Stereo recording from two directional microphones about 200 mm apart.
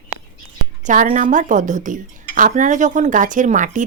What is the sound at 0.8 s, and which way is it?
Speech, 40° right (ahead or behind).